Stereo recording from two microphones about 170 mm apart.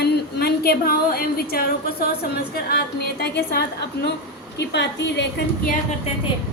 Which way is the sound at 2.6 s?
65° left (ahead or behind).